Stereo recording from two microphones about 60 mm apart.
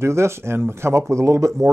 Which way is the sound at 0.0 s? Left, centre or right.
Right.